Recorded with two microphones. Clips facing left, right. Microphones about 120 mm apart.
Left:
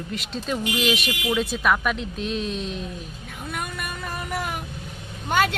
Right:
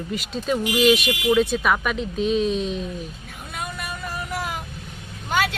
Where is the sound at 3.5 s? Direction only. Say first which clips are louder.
Even; 55° left (ahead or behind).